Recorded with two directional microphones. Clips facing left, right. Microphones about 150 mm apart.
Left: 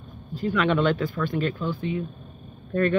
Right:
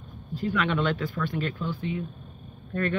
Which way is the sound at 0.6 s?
35° left (ahead or behind).